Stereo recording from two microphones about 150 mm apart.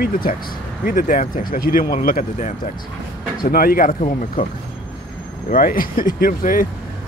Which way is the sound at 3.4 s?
80° left.